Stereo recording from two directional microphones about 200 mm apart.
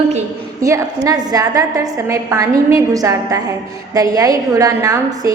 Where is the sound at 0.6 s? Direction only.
15° right (ahead or behind).